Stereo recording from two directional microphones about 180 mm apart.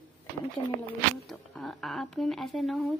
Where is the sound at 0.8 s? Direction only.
Centre (ahead or behind).